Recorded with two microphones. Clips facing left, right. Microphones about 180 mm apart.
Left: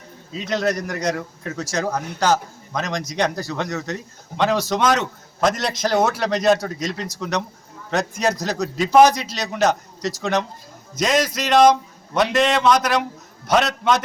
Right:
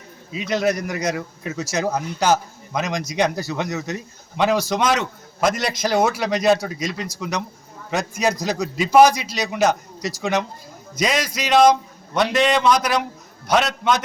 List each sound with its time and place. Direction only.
0.3 s a man's voice: 5° right (ahead or behind)